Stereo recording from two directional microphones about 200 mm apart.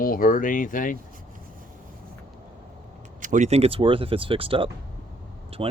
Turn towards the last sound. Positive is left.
turn(degrees=-30)  # may be behind; listen again after turning